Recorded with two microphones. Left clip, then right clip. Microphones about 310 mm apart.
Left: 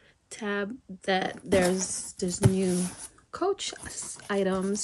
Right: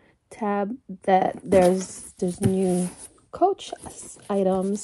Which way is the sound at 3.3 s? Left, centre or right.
Centre.